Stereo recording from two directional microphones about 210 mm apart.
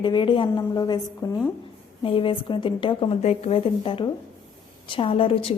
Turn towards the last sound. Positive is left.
turn(degrees=25)  # may be behind; listen again after turning